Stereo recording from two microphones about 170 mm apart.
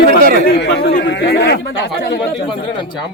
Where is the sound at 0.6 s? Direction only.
90° left.